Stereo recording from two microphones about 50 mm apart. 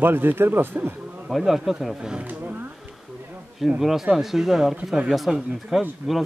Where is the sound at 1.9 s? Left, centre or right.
Centre.